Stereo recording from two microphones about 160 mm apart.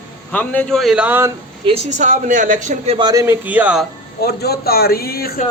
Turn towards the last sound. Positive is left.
turn(degrees=75)  # may be behind; listen again after turning